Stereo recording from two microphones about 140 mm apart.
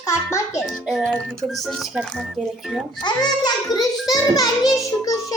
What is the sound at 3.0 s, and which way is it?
Speech, 30° left (ahead or behind).